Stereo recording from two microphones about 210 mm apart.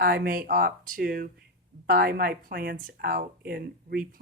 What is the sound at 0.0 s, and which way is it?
Speech, 45° right (ahead or behind).